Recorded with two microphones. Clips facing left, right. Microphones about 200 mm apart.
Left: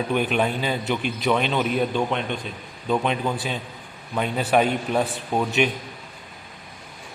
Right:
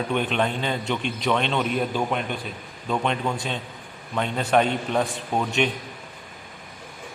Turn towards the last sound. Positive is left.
turn(degrees=5)  # may be behind; listen again after turning